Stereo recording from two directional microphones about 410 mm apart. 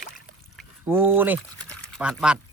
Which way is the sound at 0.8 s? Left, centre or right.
Centre.